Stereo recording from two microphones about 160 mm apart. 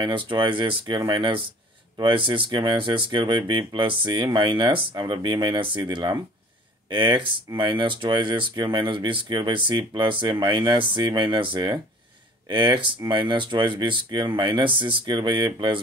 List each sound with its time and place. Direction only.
0.0 s speech: 30° right (ahead or behind)